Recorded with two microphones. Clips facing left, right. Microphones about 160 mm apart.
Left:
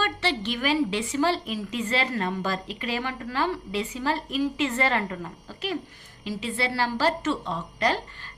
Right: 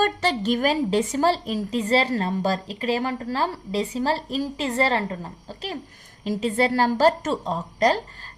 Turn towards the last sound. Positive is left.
turn(degrees=-40)  # may be behind; listen again after turning